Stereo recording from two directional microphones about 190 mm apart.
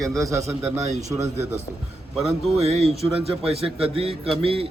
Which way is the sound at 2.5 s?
30° right (ahead or behind).